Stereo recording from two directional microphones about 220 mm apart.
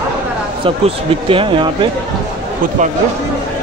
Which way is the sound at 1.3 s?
25° right (ahead or behind).